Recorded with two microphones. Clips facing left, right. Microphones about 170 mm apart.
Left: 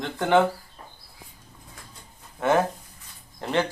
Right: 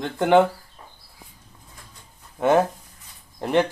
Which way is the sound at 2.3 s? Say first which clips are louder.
Right 3 dB; 15° right (ahead or behind).